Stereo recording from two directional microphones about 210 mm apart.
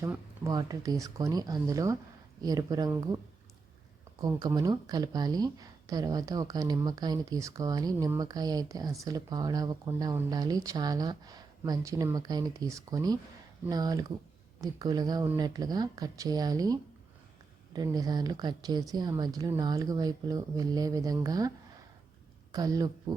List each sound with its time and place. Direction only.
0.0 s speech: 15° right (ahead or behind)
4.2 s speech: 15° right (ahead or behind)
17.7 s speech: 20° right (ahead or behind)
22.5 s speech: 15° right (ahead or behind)